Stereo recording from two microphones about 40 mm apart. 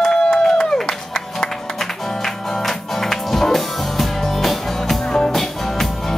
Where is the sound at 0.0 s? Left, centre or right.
Centre.